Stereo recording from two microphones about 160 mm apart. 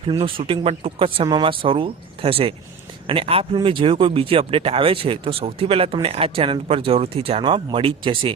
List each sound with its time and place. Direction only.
0.1 s speech: 30° right (ahead or behind)